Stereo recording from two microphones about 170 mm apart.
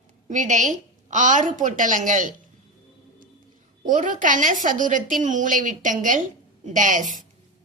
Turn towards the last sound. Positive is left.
turn(degrees=-50)  # may be behind; listen again after turning